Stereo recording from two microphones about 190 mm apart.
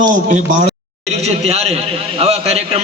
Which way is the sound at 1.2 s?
35° right (ahead or behind).